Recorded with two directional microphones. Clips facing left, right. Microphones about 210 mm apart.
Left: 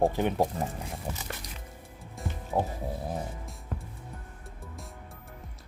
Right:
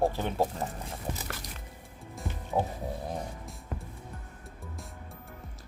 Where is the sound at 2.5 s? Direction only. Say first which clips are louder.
Even; centre (ahead or behind).